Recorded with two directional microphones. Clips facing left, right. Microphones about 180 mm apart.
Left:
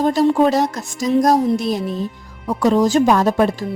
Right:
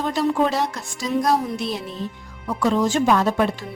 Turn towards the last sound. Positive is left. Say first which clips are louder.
# left 4 dB
turn(degrees=40)  # may be behind; listen again after turning